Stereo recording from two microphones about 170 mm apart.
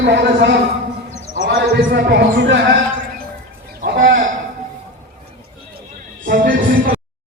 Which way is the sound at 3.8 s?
55° right (ahead or behind).